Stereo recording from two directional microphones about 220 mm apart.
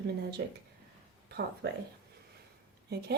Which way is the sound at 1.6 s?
50° right (ahead or behind).